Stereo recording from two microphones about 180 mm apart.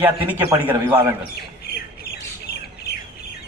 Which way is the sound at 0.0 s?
10° right (ahead or behind).